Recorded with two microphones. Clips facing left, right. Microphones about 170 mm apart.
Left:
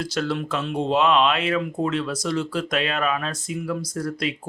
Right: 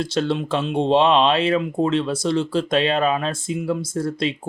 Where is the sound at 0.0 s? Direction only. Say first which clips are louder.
Right 4 dB; 25° right (ahead or behind).